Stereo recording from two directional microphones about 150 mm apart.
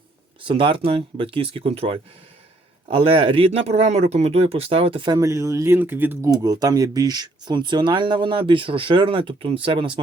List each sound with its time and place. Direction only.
0.4 s speech: 35° right (ahead or behind); by 6.3 s 15° right (ahead or behind)
6.3 s speech: 25° right (ahead or behind)